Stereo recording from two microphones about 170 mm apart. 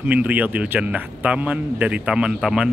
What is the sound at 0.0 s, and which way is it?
Speech, 10° right (ahead or behind).